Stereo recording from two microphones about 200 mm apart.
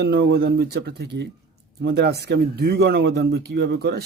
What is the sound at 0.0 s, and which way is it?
Speech, 55° right (ahead or behind).